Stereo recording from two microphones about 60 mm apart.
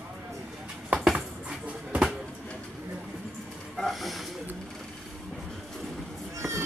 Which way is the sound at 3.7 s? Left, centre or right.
Centre.